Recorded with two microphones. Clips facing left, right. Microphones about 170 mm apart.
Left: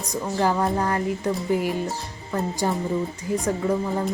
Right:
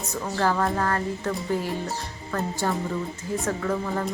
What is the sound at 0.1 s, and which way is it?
A woman's voice, 15° left (ahead or behind).